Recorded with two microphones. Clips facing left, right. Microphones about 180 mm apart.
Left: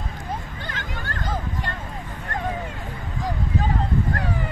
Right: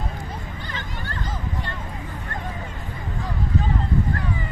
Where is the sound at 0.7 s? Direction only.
50° left (ahead or behind).